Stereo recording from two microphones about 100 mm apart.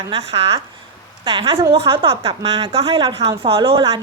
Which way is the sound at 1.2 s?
65° right (ahead or behind).